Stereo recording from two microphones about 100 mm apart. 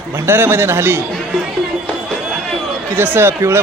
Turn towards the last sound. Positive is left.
turn(degrees=-25)  # may be behind; listen again after turning